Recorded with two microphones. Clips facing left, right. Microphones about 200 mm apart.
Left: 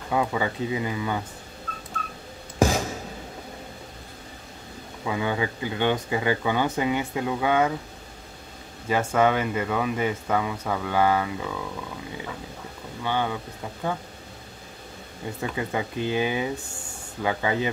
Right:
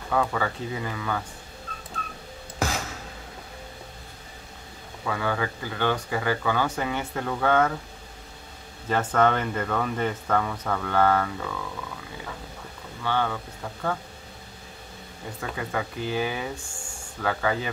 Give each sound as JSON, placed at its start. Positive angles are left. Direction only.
{"t": 0.1, "sound": "speech", "side_deg": 15}
{"t": 5.0, "sound": "speech", "side_deg": 15}
{"t": 8.8, "sound": "speech", "side_deg": 10}
{"t": 13.0, "sound": "speech", "side_deg": 15}
{"t": 15.5, "sound": "speech", "side_deg": 20}